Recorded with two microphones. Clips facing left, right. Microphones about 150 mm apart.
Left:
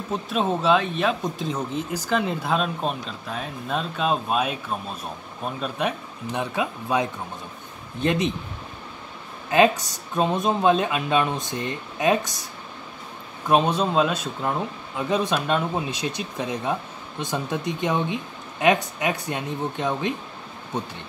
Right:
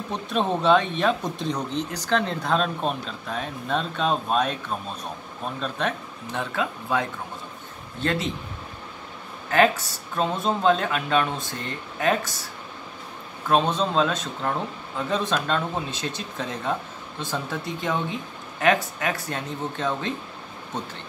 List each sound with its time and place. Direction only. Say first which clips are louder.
0.1 s speech: left 1 dB; centre (ahead or behind)
9.5 s speech: left 2 dB; 20° left (ahead or behind)
13.5 s speech: left 2 dB; 10° left (ahead or behind)